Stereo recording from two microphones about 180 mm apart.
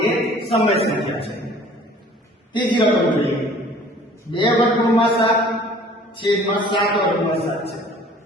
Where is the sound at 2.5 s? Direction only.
25° left (ahead or behind).